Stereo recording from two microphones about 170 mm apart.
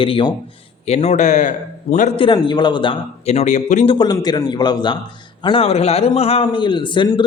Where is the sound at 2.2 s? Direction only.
30° left (ahead or behind).